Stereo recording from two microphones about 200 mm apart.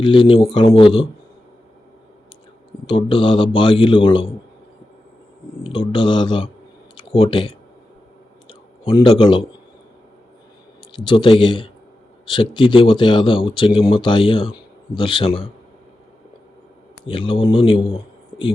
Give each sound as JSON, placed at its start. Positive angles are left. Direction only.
{"t": 0.0, "sound": "speech", "side_deg": 25}
{"t": 2.8, "sound": "speech", "side_deg": 25}
{"t": 5.6, "sound": "speech", "side_deg": 25}
{"t": 8.8, "sound": "speech", "side_deg": 30}
{"t": 10.9, "sound": "speech", "side_deg": 25}
{"t": 17.1, "sound": "a man's voice", "side_deg": 25}